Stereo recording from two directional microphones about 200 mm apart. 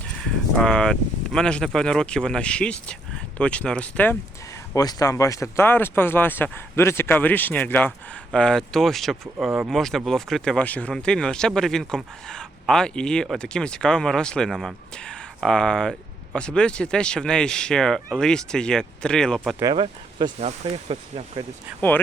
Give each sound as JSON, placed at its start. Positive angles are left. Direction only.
{"t": 0.2, "sound": "speech", "side_deg": 5}
{"t": 19.7, "sound": "speech", "side_deg": -25}
{"t": 21.8, "sound": "speech", "side_deg": 10}